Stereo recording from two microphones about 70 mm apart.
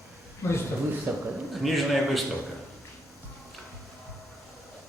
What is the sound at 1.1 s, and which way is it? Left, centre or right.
Speech, right.